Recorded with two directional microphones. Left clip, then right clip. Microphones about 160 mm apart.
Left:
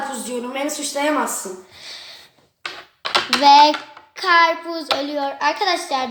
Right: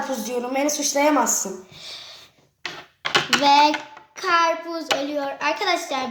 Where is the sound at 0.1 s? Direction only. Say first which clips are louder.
Right 1 dB; 60° right (ahead or behind).